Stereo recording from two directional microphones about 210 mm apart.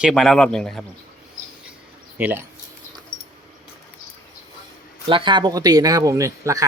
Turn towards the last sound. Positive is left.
turn(degrees=-15)  # may be behind; listen again after turning